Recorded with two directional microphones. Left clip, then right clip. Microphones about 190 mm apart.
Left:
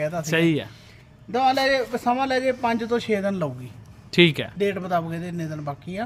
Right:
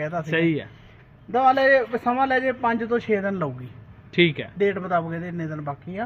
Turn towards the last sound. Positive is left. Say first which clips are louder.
# even
turn(degrees=0)  # may be behind; listen again after turning